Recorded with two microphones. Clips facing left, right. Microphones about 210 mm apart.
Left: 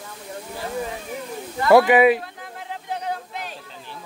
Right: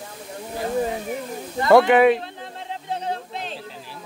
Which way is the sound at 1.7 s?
5° left (ahead or behind).